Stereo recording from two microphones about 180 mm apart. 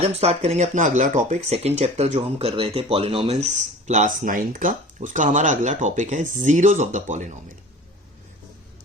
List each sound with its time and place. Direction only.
0.0 s speech: 35° right (ahead or behind)